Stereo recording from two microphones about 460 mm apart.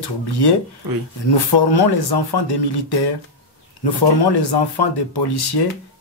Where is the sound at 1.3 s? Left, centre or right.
Left.